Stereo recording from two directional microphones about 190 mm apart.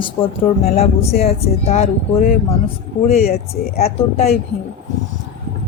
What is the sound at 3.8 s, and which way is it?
Speech, 35° left (ahead or behind).